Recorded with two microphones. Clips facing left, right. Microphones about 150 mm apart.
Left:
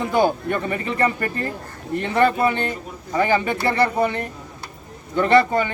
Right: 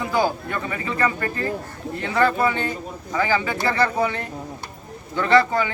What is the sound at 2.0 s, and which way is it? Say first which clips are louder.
Speech: left 2 dB; 20° left (ahead or behind).